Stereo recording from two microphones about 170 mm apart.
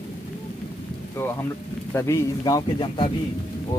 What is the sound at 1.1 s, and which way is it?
A man's voice, 15° left (ahead or behind).